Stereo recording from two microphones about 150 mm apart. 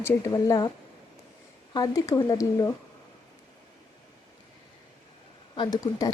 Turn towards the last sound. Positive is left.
turn(degrees=25)  # may be behind; listen again after turning